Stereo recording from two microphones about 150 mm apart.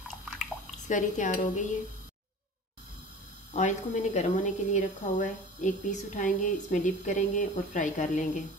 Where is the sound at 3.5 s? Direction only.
50° left (ahead or behind).